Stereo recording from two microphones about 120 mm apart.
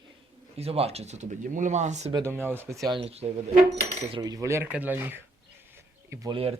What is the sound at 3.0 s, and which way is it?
Speech, 60° right (ahead or behind).